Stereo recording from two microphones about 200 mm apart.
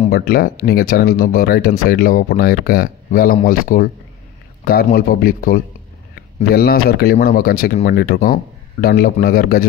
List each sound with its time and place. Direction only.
0.1 s speech: 50° left (ahead or behind)